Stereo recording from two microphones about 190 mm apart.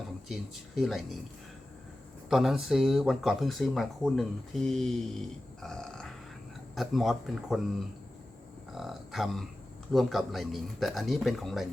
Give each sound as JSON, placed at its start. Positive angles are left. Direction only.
{"t": 0.3, "sound": "speech", "side_deg": 0}
{"t": 2.3, "sound": "speech", "side_deg": 0}